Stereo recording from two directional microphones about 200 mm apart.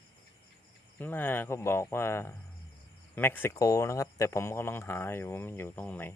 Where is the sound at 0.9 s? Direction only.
10° left (ahead or behind).